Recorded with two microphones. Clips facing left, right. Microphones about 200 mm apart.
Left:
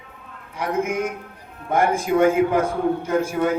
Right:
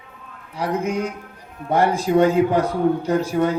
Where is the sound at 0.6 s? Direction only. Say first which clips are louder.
Even; 35° right (ahead or behind).